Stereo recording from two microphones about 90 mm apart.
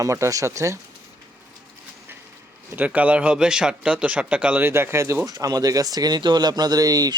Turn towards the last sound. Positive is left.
turn(degrees=-45)  # may be behind; listen again after turning